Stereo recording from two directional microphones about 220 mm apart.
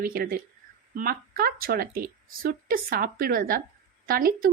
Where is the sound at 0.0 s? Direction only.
40° right (ahead or behind).